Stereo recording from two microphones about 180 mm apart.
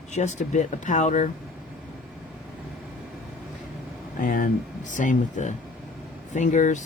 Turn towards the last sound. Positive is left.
turn(degrees=45)  # may be behind; listen again after turning